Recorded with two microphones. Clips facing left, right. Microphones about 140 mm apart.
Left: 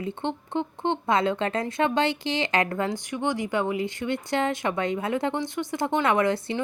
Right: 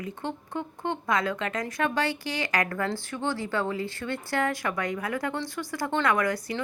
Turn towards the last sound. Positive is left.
turn(degrees=25)  # may be behind; listen again after turning